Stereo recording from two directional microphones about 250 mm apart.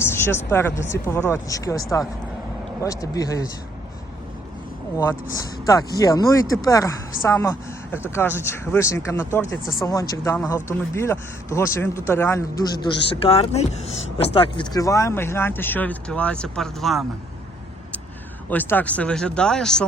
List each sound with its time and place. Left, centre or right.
0.0 s speech: centre
4.9 s speech: centre
12.8 s speech: left; by 17.1 s centre
18.5 s speech: centre